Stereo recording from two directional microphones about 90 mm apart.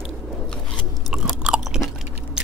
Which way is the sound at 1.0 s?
5° right (ahead or behind).